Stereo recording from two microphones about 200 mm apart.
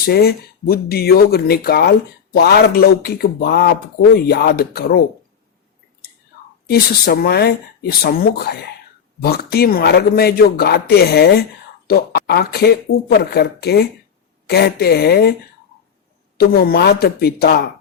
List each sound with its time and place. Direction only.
0.0 s speech: 50° left (ahead or behind)
6.7 s speech: 50° left (ahead or behind)
16.4 s speech: 50° left (ahead or behind)